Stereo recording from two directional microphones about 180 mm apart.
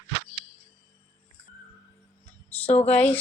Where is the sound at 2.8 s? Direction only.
10° left (ahead or behind).